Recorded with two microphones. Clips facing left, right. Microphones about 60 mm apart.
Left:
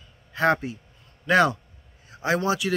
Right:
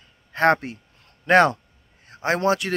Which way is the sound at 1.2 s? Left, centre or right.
Right.